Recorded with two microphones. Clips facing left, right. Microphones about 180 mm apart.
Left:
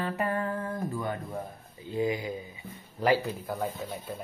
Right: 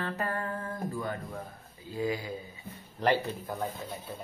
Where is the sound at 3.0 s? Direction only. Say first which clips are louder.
Left 2 dB; 5° left (ahead or behind).